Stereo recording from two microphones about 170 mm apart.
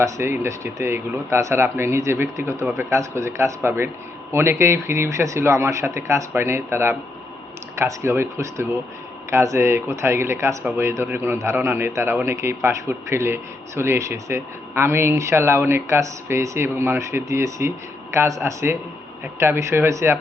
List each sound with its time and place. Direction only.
0.0 s speech: 15° right (ahead or behind)